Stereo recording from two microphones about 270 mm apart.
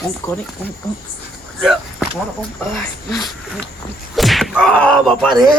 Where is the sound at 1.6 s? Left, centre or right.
Centre.